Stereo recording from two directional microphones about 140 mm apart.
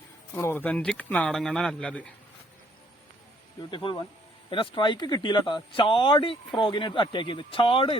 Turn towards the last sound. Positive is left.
turn(degrees=40)  # may be behind; listen again after turning